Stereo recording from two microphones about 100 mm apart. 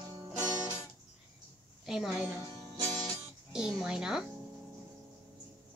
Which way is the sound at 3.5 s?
5° right (ahead or behind).